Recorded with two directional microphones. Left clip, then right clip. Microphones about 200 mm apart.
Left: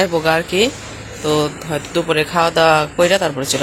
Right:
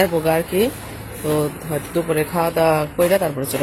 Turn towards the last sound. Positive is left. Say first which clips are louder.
# left 3 dB
turn(degrees=0)  # may be behind; listen again after turning